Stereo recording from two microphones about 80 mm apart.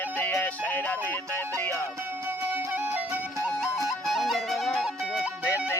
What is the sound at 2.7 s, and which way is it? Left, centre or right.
Music, right.